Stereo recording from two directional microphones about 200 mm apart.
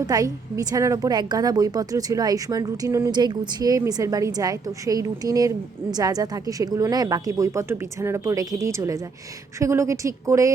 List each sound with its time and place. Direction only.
0.1 s a woman's voice: 20° right (ahead or behind)